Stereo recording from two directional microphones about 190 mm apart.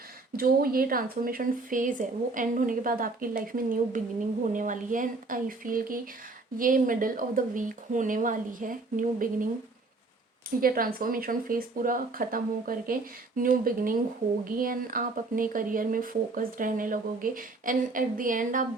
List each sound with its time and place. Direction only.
0.3 s speech: 50° right (ahead or behind)
10.6 s speech: 50° right (ahead or behind)